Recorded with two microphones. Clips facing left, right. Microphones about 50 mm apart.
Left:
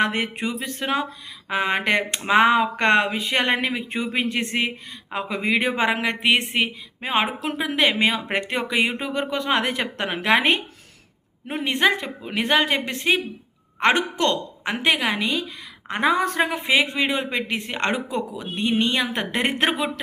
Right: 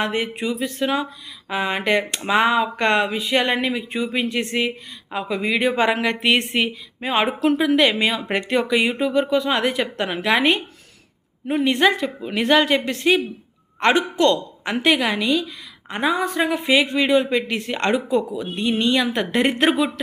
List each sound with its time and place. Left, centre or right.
0.0 s a woman's voice: left
6.2 s speech: centre
7.0 s a woman's voice: left
15.9 s a woman's voice: left
16.5 s a woman's voice: left